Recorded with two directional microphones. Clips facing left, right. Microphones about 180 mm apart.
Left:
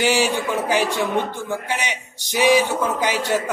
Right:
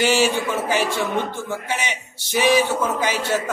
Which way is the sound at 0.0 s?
15° left (ahead or behind).